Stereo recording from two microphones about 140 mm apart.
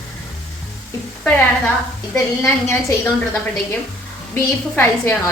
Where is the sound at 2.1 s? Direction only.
15° left (ahead or behind).